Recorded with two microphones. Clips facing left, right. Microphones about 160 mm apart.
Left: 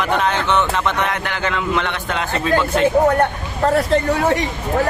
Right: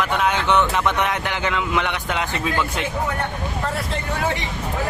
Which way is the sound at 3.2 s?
50° left (ahead or behind).